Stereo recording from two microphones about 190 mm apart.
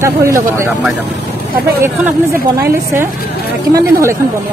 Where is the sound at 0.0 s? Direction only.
15° right (ahead or behind).